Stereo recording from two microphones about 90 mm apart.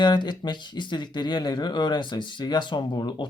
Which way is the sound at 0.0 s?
55° left (ahead or behind).